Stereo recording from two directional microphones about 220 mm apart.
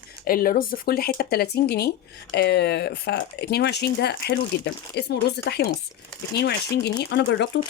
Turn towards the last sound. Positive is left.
turn(degrees=50)  # may be behind; listen again after turning